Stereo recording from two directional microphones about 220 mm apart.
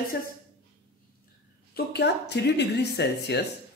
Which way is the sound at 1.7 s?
50° left (ahead or behind).